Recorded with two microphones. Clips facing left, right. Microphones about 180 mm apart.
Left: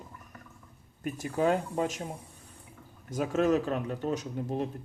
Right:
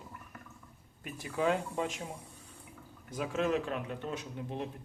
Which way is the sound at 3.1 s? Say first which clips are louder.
Left 6 dB; 45° left (ahead or behind).